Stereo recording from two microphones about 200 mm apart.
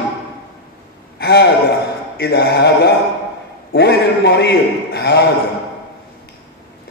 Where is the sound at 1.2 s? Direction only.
55° left (ahead or behind).